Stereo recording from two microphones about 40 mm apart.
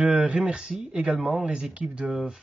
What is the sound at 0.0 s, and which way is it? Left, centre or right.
Speech, right.